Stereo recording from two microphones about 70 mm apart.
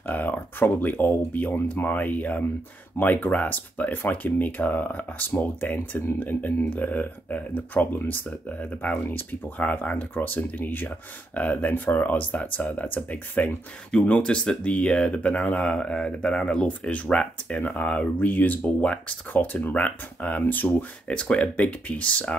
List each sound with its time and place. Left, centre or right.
0.0 s speech: left